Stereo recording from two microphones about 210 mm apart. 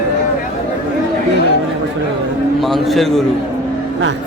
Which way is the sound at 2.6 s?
Centre (ahead or behind).